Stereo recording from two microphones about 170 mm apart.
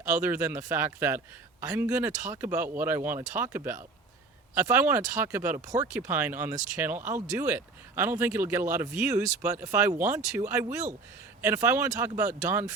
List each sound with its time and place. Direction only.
0.1 s speech: 10° right (ahead or behind)